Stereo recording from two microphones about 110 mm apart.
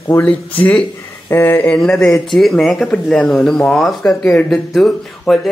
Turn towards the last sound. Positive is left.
turn(degrees=0)  # may be behind; listen again after turning